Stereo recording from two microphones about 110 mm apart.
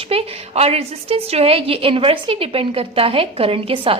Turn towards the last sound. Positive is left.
turn(degrees=-55)  # may be behind; listen again after turning